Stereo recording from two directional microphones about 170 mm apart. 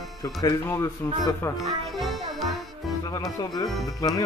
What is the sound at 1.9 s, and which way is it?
Music, centre (ahead or behind).